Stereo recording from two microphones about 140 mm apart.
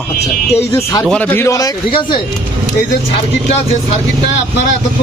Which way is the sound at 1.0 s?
10° left (ahead or behind).